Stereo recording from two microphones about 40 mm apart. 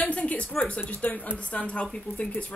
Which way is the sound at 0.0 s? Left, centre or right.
Left.